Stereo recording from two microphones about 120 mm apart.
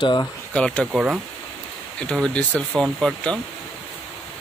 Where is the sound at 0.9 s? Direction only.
5° right (ahead or behind).